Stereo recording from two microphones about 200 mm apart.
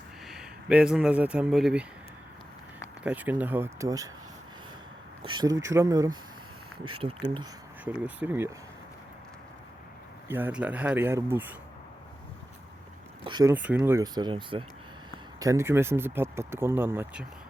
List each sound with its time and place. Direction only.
0.3 s speech: 5° right (ahead or behind)
3.0 s speech: 5° right (ahead or behind)
5.2 s speech: 20° right (ahead or behind)
7.9 s speech: 5° right (ahead or behind)
10.2 s speech: 10° right (ahead or behind)
13.2 s speech: 20° right (ahead or behind)
13.5 s speech: 10° right (ahead or behind)